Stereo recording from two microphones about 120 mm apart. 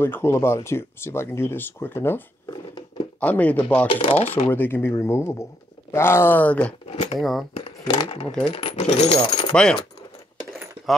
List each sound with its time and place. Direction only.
0.0 s speech: 20° left (ahead or behind)
2.4 s a sound: 35° left (ahead or behind)
3.2 s speech: 10° left (ahead or behind)
3.9 s speech: 50° left (ahead or behind)
4.5 s speech: 15° left (ahead or behind)
6.9 s a sound: 55° left (ahead or behind)
7.2 s speech: centre (ahead or behind)
7.8 s speech: 35° left (ahead or behind)
8.5 s speech: 50° left (ahead or behind)
9.5 s speech: 5° left (ahead or behind)